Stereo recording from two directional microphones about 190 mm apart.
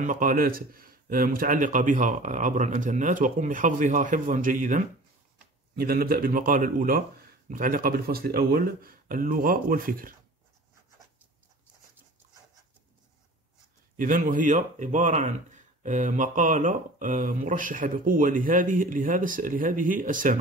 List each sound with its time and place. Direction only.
0.0 s speech: 45° right (ahead or behind)
13.9 s speech: 45° right (ahead or behind)